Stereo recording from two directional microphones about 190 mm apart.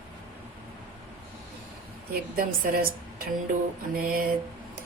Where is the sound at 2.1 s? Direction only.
50° right (ahead or behind).